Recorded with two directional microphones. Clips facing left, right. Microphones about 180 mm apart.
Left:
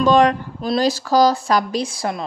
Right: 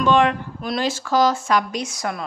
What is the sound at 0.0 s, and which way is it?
Speech, 40° left (ahead or behind).